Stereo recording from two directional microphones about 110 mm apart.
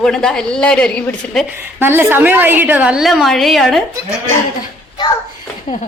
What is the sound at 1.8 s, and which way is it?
A woman's voice, 20° right (ahead or behind).